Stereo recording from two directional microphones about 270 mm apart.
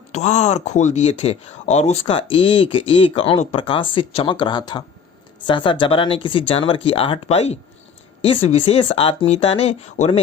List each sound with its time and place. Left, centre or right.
0.1 s speech: left